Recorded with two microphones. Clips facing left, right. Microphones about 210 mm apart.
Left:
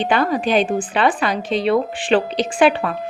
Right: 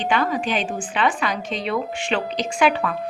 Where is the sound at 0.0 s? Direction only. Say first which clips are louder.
Left 4 dB; 35° left (ahead or behind).